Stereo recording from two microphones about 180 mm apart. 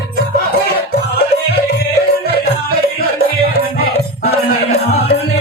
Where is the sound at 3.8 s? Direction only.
60° left (ahead or behind).